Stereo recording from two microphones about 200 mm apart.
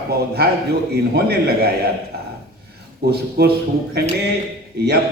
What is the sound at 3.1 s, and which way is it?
Speech, 55° right (ahead or behind).